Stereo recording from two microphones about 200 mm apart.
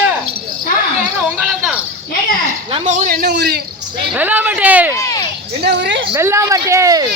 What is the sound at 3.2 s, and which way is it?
Speech, 55° right (ahead or behind).